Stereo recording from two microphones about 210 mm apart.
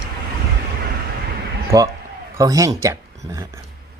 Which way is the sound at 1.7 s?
15° right (ahead or behind).